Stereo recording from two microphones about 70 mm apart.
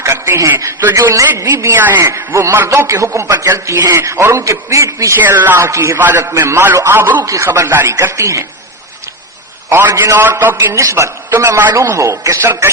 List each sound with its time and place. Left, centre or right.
0.0 s a sound: right
0.6 s a man's voice: right
5.2 s a man's voice: right
7.3 s a man's voice: right
7.9 s a man's voice: right
9.6 s a man's voice: right
9.9 s a man's voice: right
10.2 s a man's voice: right
10.6 s a man's voice: right
11.7 s a man's voice: right